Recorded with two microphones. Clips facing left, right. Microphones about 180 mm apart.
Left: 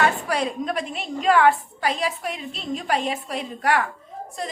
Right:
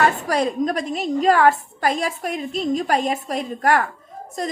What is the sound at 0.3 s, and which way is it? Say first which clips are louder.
A woman's voice: right 4 dB; 40° right (ahead or behind).